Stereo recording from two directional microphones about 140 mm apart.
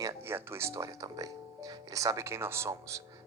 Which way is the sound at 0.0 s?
20° right (ahead or behind).